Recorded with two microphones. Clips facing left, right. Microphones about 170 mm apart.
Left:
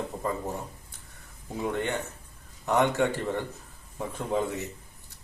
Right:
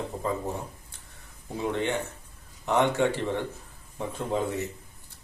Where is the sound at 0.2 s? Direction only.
Centre (ahead or behind).